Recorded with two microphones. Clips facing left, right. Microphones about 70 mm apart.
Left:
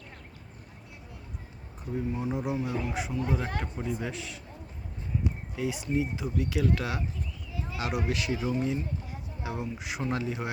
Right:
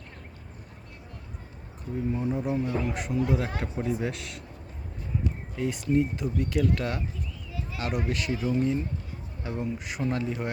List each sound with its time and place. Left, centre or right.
2.1 s speech: centre
10.2 s speech: centre